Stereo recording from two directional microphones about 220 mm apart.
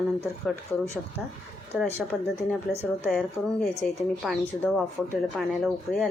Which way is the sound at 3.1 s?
Centre (ahead or behind).